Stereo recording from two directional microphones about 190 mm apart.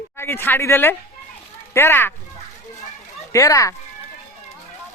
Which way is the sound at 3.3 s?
15° left (ahead or behind).